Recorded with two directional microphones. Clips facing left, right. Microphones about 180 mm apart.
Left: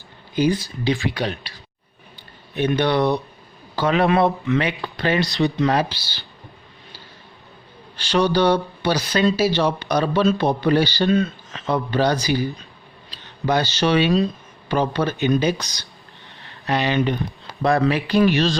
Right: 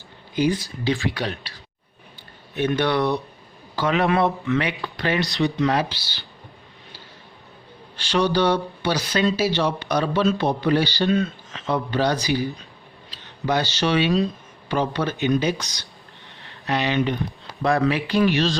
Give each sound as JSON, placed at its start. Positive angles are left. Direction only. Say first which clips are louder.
{"t": 0.9, "sound": "speech", "louder": "left 2 dB", "side_deg": 15}
{"t": 2.6, "sound": "speech", "louder": "left 2 dB", "side_deg": 20}
{"t": 3.8, "sound": "speech", "louder": "left 2 dB", "side_deg": 35}
{"t": 4.1, "sound": "speech", "louder": "left 2 dB", "side_deg": 20}
{"t": 7.9, "sound": "speech", "louder": "left 2 dB", "side_deg": 40}
{"t": 13.4, "sound": "speech", "louder": "left 2 dB", "side_deg": 40}